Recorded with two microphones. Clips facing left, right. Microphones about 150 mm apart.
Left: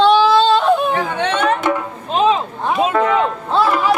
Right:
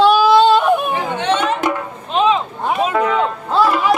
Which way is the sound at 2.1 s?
40° left (ahead or behind).